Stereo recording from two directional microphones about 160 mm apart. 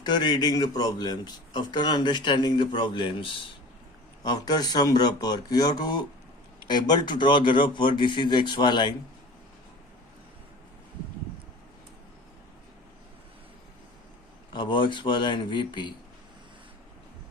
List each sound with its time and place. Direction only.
0.0 s a man's voice: 25° left (ahead or behind)
14.5 s a man's voice: 30° left (ahead or behind)